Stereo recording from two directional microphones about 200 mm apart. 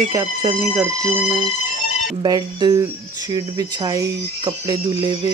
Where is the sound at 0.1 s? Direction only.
15° right (ahead or behind).